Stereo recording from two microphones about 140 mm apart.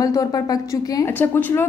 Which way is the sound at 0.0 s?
25° left (ahead or behind).